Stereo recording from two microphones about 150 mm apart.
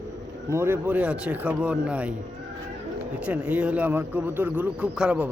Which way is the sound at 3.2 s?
10° right (ahead or behind).